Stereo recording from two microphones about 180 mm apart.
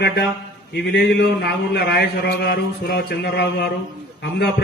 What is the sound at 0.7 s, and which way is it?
A man's voice, 65° left (ahead or behind).